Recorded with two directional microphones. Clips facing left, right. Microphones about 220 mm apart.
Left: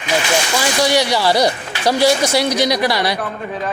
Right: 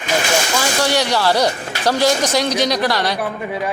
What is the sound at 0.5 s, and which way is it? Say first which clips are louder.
Speech: left 4 dB; 10° left (ahead or behind).